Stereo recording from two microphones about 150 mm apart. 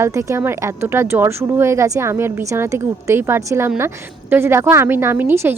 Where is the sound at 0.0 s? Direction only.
20° right (ahead or behind).